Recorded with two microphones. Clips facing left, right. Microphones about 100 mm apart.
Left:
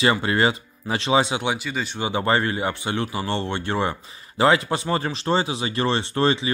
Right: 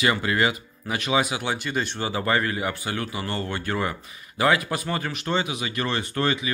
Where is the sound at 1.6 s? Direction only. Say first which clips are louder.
Right 1 dB; centre (ahead or behind).